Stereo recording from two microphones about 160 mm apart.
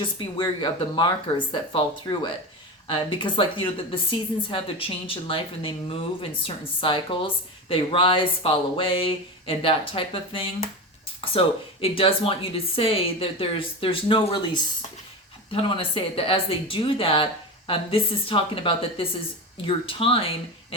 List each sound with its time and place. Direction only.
0.0 s speech: 30° left (ahead or behind)